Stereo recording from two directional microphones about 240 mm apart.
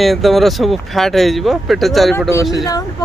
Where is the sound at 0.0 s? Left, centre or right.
Centre.